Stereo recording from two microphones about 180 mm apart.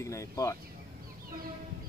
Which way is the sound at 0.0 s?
15° left (ahead or behind).